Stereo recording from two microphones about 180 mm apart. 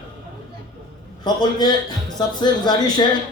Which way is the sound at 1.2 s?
25° left (ahead or behind).